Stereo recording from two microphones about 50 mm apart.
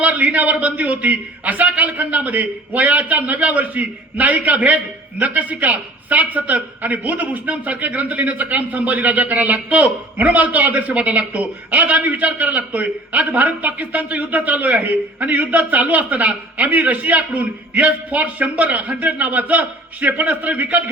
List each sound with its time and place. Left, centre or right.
0.0 s a man's voice: right